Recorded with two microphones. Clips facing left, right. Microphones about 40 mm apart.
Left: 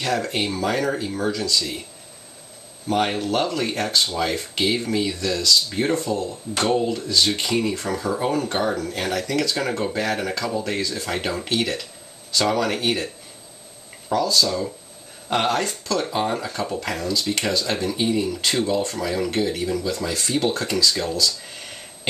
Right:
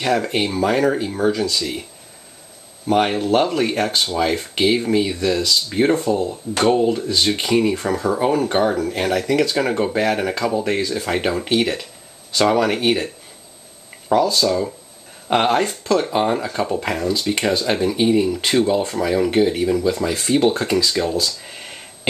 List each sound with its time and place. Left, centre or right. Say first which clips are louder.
0.0 s speech: right 4 dB; centre
2.9 s speech: right 5 dB; right